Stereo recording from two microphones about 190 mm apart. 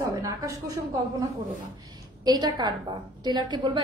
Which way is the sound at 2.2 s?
20° right (ahead or behind).